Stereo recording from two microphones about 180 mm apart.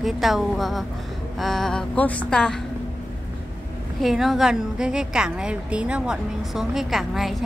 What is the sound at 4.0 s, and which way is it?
A woman's voice, centre (ahead or behind).